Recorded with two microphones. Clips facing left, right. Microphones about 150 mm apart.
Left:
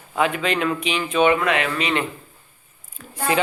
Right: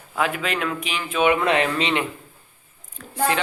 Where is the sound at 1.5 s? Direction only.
30° right (ahead or behind).